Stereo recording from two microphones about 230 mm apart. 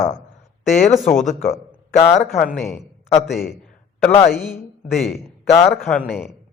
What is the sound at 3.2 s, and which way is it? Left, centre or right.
Speech, centre.